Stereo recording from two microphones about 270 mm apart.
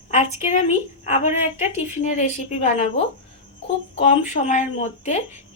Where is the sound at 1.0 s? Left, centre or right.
Left.